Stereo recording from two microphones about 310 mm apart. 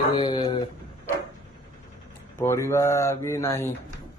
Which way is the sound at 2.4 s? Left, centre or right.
Centre.